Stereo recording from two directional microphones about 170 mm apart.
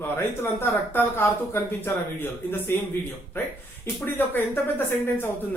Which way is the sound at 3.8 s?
10° left (ahead or behind).